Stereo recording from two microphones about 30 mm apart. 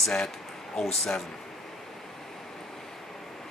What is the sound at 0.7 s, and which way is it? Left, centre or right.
Speech, centre.